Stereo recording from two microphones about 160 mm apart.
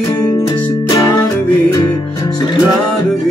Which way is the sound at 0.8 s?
25° left (ahead or behind).